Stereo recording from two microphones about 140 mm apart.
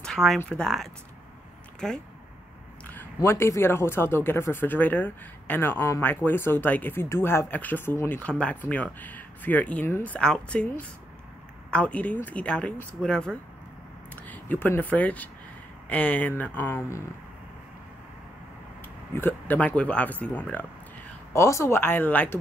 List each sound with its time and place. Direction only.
0.0 s a sound: centre (ahead or behind)
0.4 s speech: 5° left (ahead or behind)
3.2 s speech: 20° left (ahead or behind)
19.1 s speech: 15° left (ahead or behind)
21.3 s speech: 20° left (ahead or behind)